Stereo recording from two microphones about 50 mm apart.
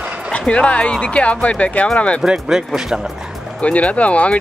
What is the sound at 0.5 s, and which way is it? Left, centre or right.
Speech, left.